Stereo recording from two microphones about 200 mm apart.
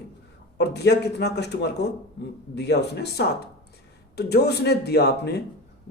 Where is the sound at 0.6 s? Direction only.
55° left (ahead or behind).